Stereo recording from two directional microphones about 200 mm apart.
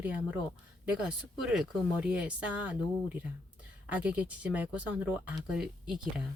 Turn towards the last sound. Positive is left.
turn(degrees=0)  # may be behind; listen again after turning